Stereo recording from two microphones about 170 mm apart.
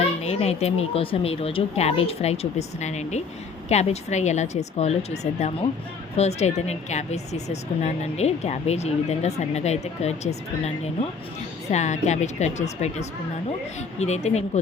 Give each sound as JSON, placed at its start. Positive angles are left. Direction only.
{"t": 0.2, "sound": "speech", "side_deg": 40}